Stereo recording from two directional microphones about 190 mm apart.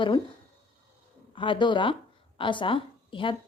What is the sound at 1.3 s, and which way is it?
A woman's voice, 25° left (ahead or behind).